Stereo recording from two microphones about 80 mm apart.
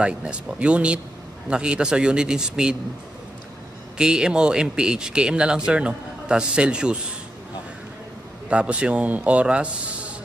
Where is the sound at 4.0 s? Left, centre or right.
Centre.